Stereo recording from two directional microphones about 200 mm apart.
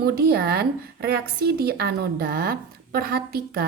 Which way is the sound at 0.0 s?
50° right (ahead or behind).